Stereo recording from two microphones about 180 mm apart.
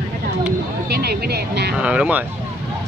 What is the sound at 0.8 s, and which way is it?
Speech, 60° right (ahead or behind).